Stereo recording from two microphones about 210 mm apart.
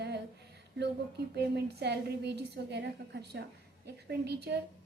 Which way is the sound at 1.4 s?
50° right (ahead or behind).